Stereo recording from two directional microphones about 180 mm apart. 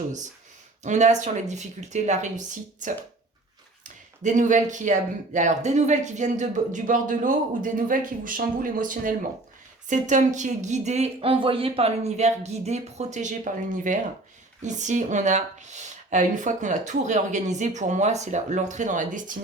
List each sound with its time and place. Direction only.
0.9 s speech: 40° right (ahead or behind)